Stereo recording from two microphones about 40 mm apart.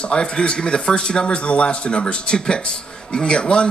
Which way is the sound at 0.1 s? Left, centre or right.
Left.